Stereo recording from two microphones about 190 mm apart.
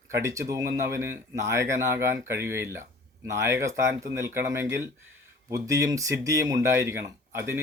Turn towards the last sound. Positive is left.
turn(degrees=-10)  # may be behind; listen again after turning